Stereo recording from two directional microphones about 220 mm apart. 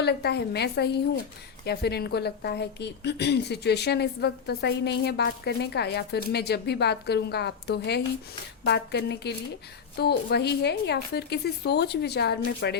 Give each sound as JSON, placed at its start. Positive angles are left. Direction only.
{"t": 0.0, "sound": "a woman's voice", "side_deg": 50}